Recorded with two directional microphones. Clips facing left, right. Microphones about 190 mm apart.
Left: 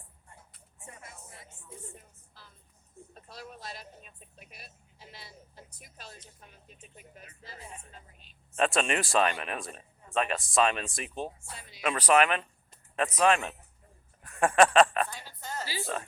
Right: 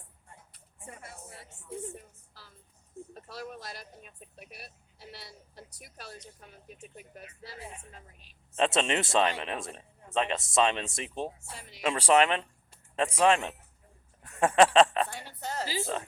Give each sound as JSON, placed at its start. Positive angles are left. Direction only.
{"t": 1.5, "sound": "music", "side_deg": -70}
{"t": 8.5, "sound": "speech", "side_deg": -20}
{"t": 14.3, "sound": "a sound", "side_deg": -25}
{"t": 15.1, "sound": "music", "side_deg": -65}